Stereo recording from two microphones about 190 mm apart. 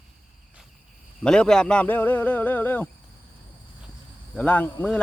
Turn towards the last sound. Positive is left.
turn(degrees=10)  # may be behind; listen again after turning